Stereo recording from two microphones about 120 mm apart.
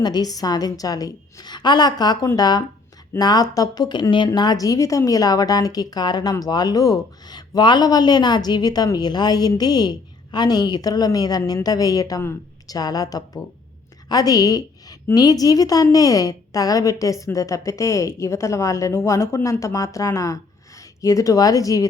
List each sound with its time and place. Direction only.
0.0 s a woman's voice: 35° left (ahead or behind)